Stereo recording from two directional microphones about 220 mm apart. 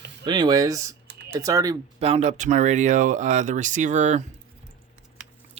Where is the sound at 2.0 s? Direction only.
30° right (ahead or behind).